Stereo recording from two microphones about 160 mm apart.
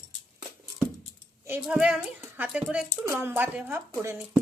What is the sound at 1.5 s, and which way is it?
A woman's voice, 10° right (ahead or behind).